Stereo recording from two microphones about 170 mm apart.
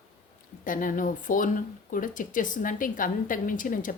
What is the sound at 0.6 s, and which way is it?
A woman's voice, 50° left (ahead or behind).